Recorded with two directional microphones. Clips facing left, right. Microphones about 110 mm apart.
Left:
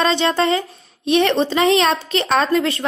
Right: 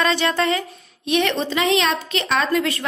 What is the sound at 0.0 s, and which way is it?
A woman's voice, 25° left (ahead or behind).